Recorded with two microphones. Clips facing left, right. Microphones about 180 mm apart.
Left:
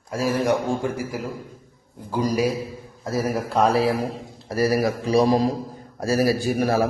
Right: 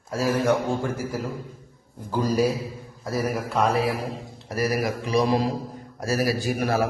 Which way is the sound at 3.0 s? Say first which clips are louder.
Left 2 dB; 30° left (ahead or behind).